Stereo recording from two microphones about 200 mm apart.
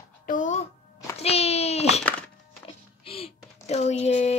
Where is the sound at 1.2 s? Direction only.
30° left (ahead or behind).